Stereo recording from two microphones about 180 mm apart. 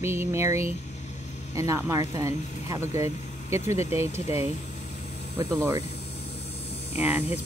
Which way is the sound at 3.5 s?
35° left (ahead or behind).